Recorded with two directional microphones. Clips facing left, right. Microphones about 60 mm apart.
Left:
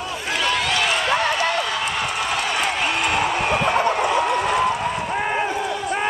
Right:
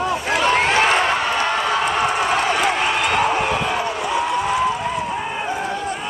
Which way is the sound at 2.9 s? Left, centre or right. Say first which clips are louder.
Right 3 dB; right.